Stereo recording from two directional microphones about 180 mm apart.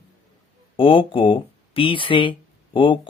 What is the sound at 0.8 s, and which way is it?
Speech, 30° left (ahead or behind).